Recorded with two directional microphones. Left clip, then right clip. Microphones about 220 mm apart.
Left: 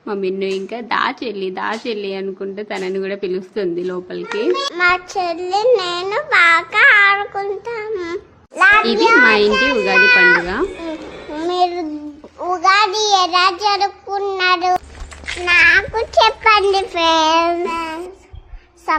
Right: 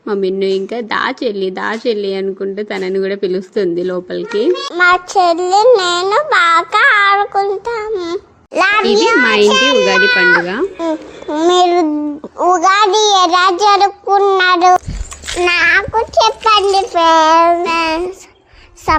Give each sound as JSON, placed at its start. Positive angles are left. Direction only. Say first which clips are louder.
{"t": 0.0, "sound": "a woman's voice", "louder": "right 5 dB", "side_deg": -15}
{"t": 4.4, "sound": "music", "louder": "right 4 dB", "side_deg": -20}
{"t": 8.5, "sound": "child singing", "louder": "right 1 dB", "side_deg": -40}
{"t": 9.2, "sound": "a woman's voice", "louder": "right 1 dB", "side_deg": -15}
{"t": 9.5, "sound": "child singing", "louder": "right 5 dB", "side_deg": -35}
{"t": 10.0, "sound": "music", "louder": "right 1 dB", "side_deg": -25}
{"t": 10.8, "sound": "child singing", "louder": "right 8 dB", "side_deg": -30}
{"t": 15.6, "sound": "a child's voice", "louder": "right 1 dB", "side_deg": -5}
{"t": 17.6, "sound": "child singing", "louder": "right 7 dB", "side_deg": -35}
{"t": 18.9, "sound": "music", "louder": "right 5 dB", "side_deg": -30}